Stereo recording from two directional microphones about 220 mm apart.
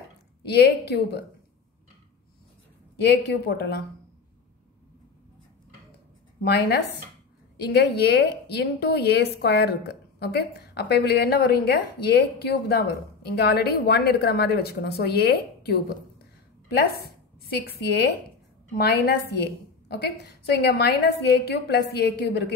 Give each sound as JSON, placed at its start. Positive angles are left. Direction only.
{"t": 0.4, "sound": "a woman's voice", "side_deg": 50}
{"t": 3.0, "sound": "a woman's voice", "side_deg": 50}
{"t": 6.4, "sound": "a woman's voice", "side_deg": 50}
{"t": 18.8, "sound": "a woman's voice", "side_deg": 45}